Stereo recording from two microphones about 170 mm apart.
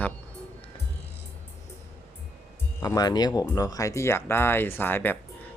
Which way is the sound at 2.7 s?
20° left (ahead or behind).